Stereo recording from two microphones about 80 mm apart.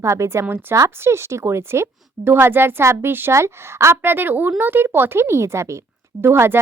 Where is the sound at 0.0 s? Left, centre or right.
Right.